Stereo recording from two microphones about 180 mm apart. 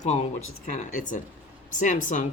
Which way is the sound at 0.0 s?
40° left (ahead or behind).